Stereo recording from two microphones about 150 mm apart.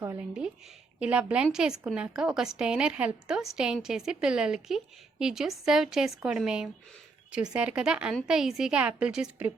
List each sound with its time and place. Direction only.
0.0 s a woman's voice: 15° right (ahead or behind)